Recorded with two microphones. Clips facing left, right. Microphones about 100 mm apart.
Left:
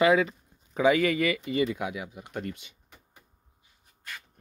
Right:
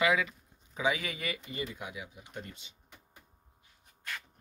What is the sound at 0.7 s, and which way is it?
Speech, 55° left (ahead or behind).